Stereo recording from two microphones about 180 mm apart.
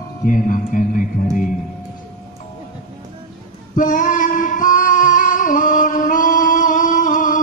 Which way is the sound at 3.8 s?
45° left (ahead or behind).